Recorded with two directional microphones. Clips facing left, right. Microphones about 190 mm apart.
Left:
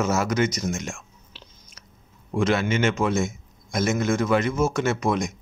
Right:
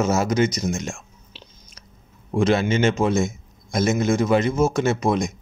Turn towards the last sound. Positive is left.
turn(degrees=-30)  # may be behind; listen again after turning